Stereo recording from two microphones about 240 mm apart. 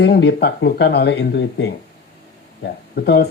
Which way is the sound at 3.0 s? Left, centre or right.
Left.